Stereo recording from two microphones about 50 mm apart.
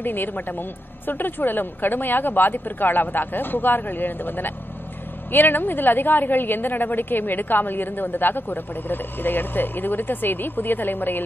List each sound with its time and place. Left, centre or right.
0.0 s a woman's voice: left